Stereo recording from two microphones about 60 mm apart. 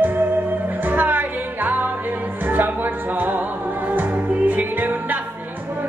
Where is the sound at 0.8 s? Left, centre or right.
Right.